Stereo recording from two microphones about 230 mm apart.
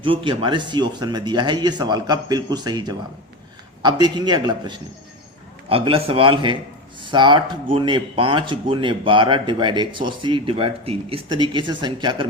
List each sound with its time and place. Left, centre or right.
0.0 s speech: right